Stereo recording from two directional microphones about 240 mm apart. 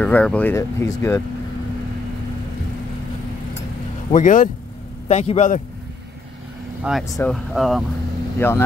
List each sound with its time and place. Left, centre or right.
0.0 s speech: centre
4.1 s a man's voice: left
6.8 s speech: centre